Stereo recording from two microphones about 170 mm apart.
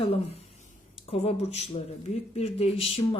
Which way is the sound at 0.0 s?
35° left (ahead or behind).